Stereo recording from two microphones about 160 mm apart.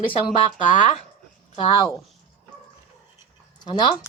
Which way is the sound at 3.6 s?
30° left (ahead or behind).